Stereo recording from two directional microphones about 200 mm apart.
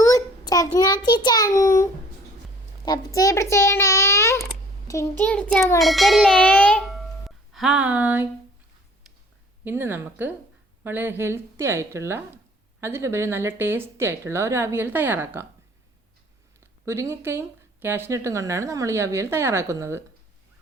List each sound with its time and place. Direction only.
0.0 s a child's voice: 15° left (ahead or behind); by 8.3 s 10° right (ahead or behind)
9.6 s speech: 10° right (ahead or behind)
16.6 s speech: 15° right (ahead or behind)